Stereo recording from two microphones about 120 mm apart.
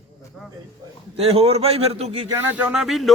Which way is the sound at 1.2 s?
55° right (ahead or behind).